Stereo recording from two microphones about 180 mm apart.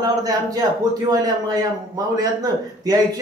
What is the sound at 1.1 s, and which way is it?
Speech, 20° right (ahead or behind).